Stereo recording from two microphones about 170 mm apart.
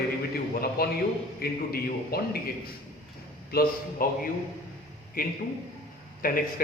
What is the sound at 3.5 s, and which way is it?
Speech, 60° left (ahead or behind).